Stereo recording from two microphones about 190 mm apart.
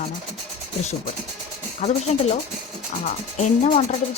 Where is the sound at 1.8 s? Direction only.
35° left (ahead or behind).